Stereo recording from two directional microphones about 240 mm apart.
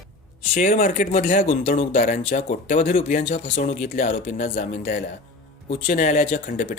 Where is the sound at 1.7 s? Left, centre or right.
Left.